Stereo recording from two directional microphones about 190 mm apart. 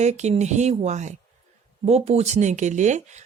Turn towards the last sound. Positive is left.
turn(degrees=-40)  # may be behind; listen again after turning